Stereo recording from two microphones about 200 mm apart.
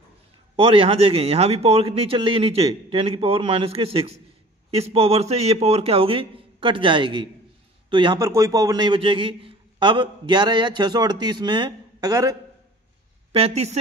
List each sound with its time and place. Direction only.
0.6 s a man's voice: 30° right (ahead or behind)
13.3 s a woman's voice: 30° right (ahead or behind)